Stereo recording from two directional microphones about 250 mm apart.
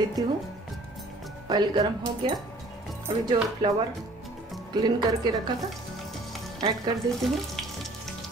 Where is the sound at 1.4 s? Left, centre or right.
Centre.